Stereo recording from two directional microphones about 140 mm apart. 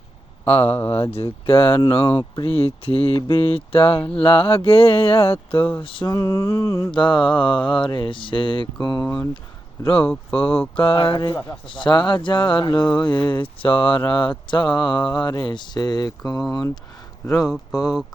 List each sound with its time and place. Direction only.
1.1 s speech: 45° left (ahead or behind)
6.1 s mantra: 20° left (ahead or behind)
6.9 s speech: 35° left (ahead or behind)
9.8 s speech: 40° left (ahead or behind)
16.5 s mantra: 25° left (ahead or behind)